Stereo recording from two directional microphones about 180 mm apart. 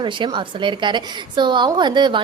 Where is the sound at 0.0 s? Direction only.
25° right (ahead or behind).